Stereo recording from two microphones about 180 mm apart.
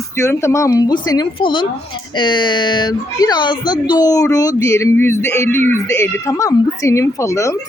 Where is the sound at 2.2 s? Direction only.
25° left (ahead or behind).